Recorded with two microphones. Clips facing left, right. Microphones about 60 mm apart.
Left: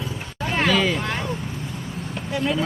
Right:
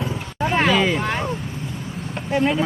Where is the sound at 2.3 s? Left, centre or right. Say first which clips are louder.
Right 6 dB; right.